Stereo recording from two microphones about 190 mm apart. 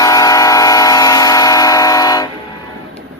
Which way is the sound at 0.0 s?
20° left (ahead or behind).